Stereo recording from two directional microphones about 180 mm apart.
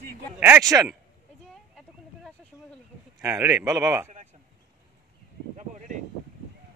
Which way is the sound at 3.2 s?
15° right (ahead or behind).